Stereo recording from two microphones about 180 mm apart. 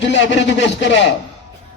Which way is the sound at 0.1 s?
80° left.